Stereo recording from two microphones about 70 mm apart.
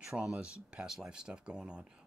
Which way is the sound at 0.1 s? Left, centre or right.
Centre.